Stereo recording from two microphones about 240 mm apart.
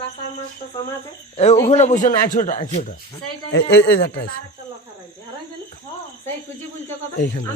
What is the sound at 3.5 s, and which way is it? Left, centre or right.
Speech, left.